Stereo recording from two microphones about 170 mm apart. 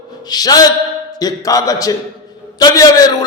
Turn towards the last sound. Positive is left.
turn(degrees=25)  # may be behind; listen again after turning